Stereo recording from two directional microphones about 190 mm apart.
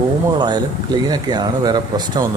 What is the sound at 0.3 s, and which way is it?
Speech, 20° right (ahead or behind).